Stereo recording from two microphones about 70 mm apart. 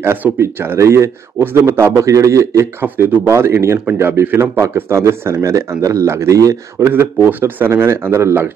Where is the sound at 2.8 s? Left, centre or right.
Right.